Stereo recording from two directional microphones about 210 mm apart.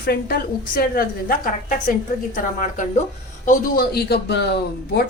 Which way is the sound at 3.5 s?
45° left (ahead or behind).